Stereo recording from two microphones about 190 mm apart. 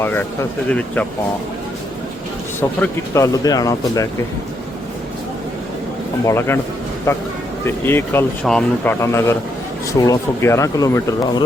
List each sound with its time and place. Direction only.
0.7 s speech: 5° left (ahead or behind)
2.6 s speech: 15° left (ahead or behind)
6.2 s speech: 15° left (ahead or behind)
7.6 s speech: 10° left (ahead or behind)